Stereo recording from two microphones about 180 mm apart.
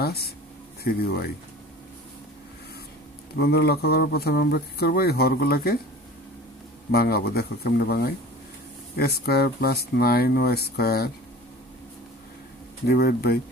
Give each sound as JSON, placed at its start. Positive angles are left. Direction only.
{"t": 0.0, "sound": "speech", "side_deg": 60}
{"t": 3.3, "sound": "speech", "side_deg": 60}
{"t": 6.9, "sound": "speech", "side_deg": 60}
{"t": 12.8, "sound": "speech", "side_deg": 60}